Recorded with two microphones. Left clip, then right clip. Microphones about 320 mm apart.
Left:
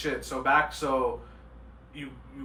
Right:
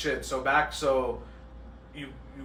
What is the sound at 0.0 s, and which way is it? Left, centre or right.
Speech, centre.